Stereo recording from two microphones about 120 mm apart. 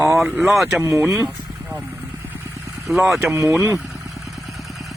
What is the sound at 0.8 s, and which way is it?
Speech, 20° right (ahead or behind).